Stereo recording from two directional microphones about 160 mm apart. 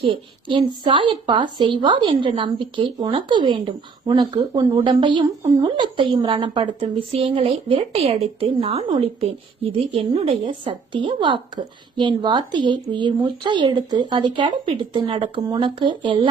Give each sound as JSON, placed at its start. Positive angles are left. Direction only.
{"t": 0.0, "sound": "a woman's voice", "side_deg": -30}